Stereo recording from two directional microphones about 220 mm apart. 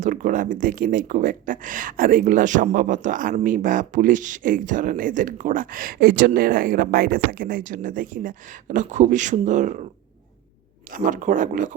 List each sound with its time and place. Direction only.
0.0 s speech: 35° right (ahead or behind)
10.9 s speech: 35° right (ahead or behind)